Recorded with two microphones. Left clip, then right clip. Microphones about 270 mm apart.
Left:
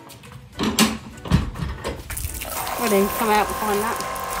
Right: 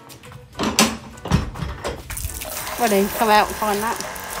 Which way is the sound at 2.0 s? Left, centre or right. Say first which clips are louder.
Right 1 dB; centre.